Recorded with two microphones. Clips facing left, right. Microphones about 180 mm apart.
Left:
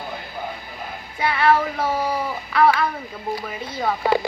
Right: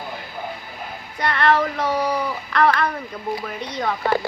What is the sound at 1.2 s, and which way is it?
Speech, 5° left (ahead or behind).